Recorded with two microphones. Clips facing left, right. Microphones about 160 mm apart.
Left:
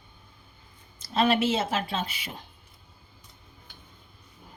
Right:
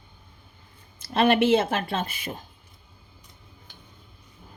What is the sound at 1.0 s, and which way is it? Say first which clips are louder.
Speech: right 3 dB; 60° right (ahead or behind).